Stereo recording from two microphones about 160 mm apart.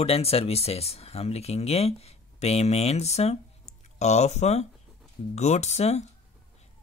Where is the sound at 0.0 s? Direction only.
40° left (ahead or behind).